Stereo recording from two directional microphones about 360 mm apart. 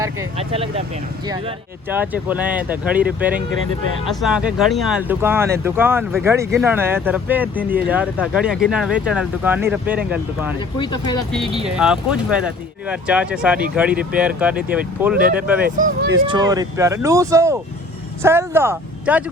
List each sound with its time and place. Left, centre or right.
0.0 s speech: centre
10.8 s speech: centre
11.6 s speech: centre
15.6 s speech: right
16.1 s speech: centre